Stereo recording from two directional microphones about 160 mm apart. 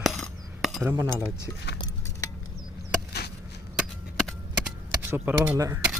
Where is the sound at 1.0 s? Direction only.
15° right (ahead or behind).